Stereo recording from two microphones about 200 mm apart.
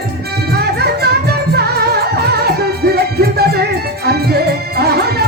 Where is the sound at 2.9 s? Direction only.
50° right (ahead or behind).